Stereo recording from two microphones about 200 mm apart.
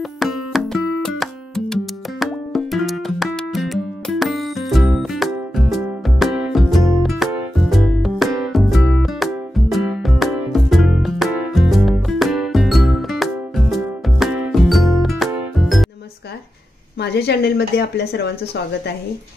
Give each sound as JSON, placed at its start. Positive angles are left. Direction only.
{"t": 0.2, "sound": "music", "side_deg": 0}
{"t": 17.0, "sound": "speech", "side_deg": 55}